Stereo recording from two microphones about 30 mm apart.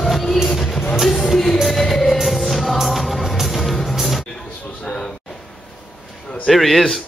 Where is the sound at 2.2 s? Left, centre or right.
Centre.